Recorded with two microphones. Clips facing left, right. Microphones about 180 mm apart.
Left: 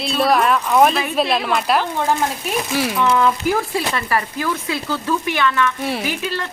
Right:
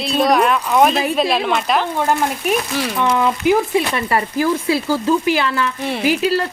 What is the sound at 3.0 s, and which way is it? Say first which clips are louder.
Speech: right 1 dB; 15° right (ahead or behind).